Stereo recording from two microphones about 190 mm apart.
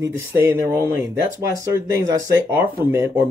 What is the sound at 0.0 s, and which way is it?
A man's voice, 15° right (ahead or behind).